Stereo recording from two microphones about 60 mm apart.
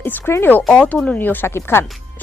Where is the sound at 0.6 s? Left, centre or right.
Left.